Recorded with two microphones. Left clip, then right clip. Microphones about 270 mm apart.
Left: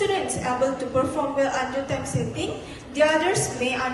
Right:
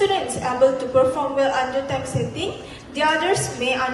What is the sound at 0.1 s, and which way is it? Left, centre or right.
A woman's voice, centre.